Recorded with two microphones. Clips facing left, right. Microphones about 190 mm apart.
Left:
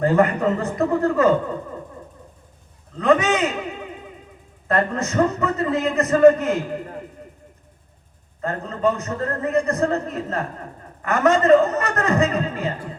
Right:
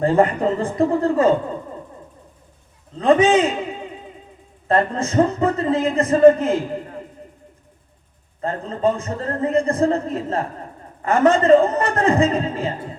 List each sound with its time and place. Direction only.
0.0 s a man's voice: 30° right (ahead or behind)
3.0 s a man's voice: 30° right (ahead or behind)
4.7 s a man's voice: 30° right (ahead or behind)
8.4 s a man's voice: 30° right (ahead or behind)